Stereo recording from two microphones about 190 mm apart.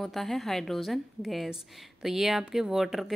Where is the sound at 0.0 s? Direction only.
Centre (ahead or behind).